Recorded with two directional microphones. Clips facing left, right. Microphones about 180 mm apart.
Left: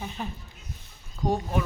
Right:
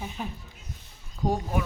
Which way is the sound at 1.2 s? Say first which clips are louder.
Left 1 dB; 5° right (ahead or behind).